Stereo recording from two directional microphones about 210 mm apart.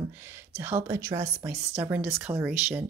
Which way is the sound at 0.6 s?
10° right (ahead or behind).